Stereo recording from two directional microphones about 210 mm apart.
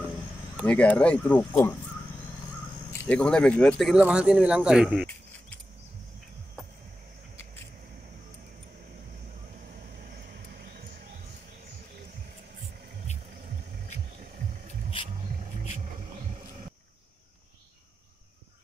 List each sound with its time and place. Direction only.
0.7 s speech: 5° left (ahead or behind)
2.9 s speech: 5° left (ahead or behind)
10.0 s vehicle: 50° right (ahead or behind)